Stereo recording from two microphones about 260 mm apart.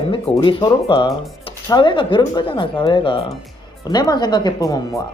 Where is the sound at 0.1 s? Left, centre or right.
Centre.